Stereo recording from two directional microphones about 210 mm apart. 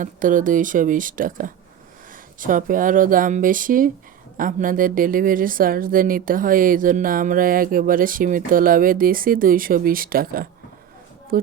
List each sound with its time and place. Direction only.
0.0 s a woman's voice: 40° right (ahead or behind)